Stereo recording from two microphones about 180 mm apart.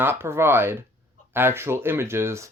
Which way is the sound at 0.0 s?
10° right (ahead or behind).